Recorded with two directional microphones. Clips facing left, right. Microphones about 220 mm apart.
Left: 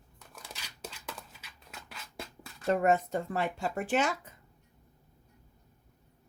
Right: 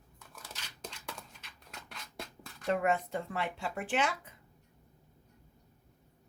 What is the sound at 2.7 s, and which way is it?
Speech, 40° left (ahead or behind).